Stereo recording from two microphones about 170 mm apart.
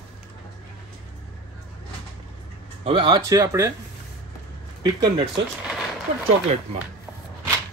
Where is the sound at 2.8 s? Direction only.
30° right (ahead or behind).